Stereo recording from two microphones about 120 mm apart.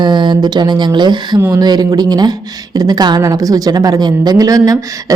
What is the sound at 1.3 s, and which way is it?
A woman's voice, 25° right (ahead or behind).